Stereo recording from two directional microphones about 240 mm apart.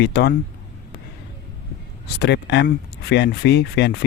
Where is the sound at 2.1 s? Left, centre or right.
Left.